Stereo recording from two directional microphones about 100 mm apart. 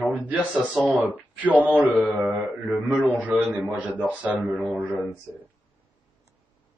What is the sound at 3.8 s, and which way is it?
Speech, 15° left (ahead or behind).